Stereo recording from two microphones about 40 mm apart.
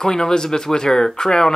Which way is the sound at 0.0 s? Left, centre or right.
Centre.